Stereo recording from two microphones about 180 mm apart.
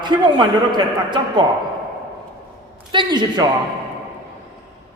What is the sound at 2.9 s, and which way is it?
Speech, 25° right (ahead or behind).